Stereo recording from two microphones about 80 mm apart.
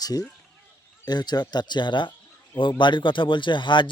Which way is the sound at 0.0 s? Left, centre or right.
Left.